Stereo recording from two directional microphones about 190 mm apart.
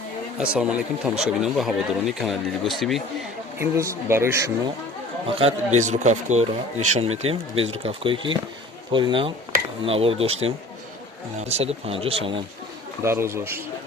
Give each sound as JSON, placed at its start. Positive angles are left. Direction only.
{"t": 0.3, "sound": "speech", "side_deg": -5}
{"t": 3.6, "sound": "speech", "side_deg": -15}
{"t": 5.3, "sound": "speech", "side_deg": -30}
{"t": 11.3, "sound": "speech", "side_deg": -35}
{"t": 13.0, "sound": "speech", "side_deg": -15}